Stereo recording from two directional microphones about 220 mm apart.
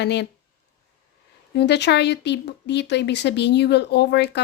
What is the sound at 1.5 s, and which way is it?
Speech, 50° left (ahead or behind).